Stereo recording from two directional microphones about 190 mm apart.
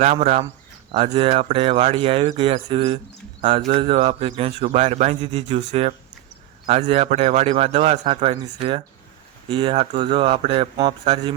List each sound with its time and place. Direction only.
0.0 s a man's voice: 35° right (ahead or behind)
9.5 s speech: 25° right (ahead or behind)